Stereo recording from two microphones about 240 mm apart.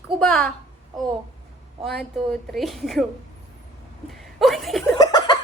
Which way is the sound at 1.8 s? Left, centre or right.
Centre.